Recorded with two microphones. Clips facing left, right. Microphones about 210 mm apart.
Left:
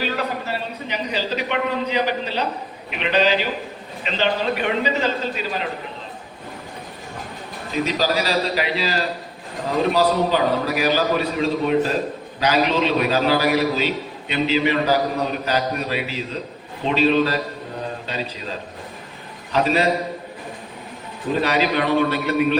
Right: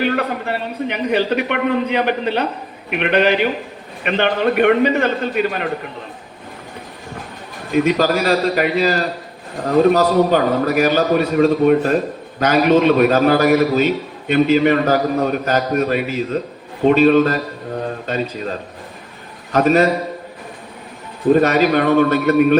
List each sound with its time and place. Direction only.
0.0 s a man's voice: 60° right (ahead or behind)
7.7 s a man's voice: 55° right (ahead or behind)
19.5 s a man's voice: 50° right (ahead or behind)
21.3 s a man's voice: 50° right (ahead or behind)